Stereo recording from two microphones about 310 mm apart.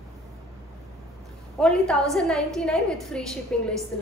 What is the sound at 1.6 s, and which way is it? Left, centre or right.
A woman's voice, centre.